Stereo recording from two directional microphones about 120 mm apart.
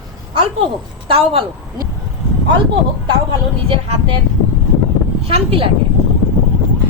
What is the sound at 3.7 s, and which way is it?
Speech, 50° right (ahead or behind).